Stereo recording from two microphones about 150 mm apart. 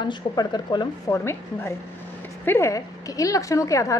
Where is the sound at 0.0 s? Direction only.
30° left (ahead or behind).